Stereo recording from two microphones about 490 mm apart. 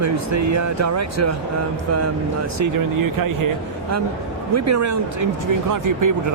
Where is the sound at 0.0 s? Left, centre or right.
Right.